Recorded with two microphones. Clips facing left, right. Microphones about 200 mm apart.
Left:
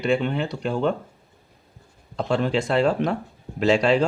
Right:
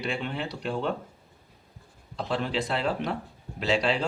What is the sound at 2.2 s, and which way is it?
Speech, 50° left (ahead or behind).